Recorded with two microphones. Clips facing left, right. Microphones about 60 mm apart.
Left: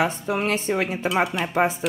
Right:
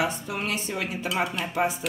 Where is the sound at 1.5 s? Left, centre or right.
Left.